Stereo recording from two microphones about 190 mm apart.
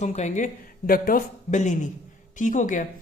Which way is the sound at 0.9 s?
50° left (ahead or behind).